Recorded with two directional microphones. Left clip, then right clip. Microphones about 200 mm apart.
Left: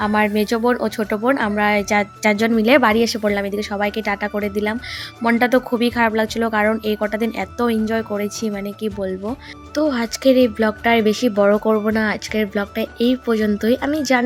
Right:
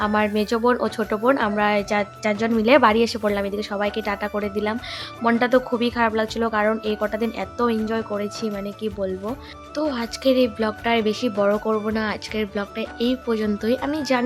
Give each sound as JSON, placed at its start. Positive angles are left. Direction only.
{"t": 0.0, "sound": "speech", "side_deg": 15}